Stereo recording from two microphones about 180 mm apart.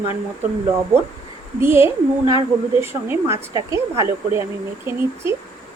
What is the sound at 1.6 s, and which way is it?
A woman's voice, 15° right (ahead or behind).